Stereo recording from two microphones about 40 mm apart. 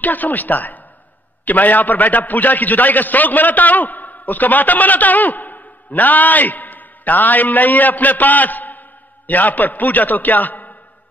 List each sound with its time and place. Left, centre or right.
0.0 s a man's voice: left